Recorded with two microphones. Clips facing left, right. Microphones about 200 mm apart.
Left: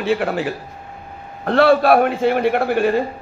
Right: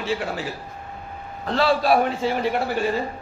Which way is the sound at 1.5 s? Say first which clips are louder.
Left 6 dB; 60° left (ahead or behind).